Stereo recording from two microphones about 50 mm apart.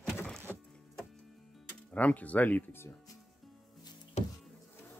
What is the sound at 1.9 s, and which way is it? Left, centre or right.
Speech, left.